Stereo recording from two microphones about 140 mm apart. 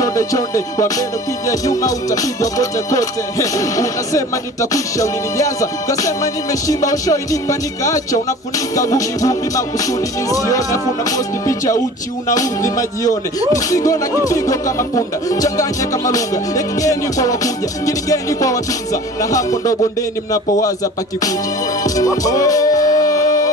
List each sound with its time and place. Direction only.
0.0 s music: 25° left (ahead or behind)
21.8 s music: 25° left (ahead or behind)